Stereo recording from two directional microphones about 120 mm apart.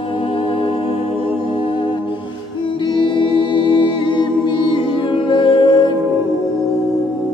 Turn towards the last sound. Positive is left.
turn(degrees=45)  # may be behind; listen again after turning